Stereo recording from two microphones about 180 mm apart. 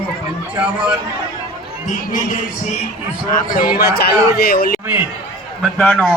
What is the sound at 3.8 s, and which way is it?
Speech, 60° left (ahead or behind).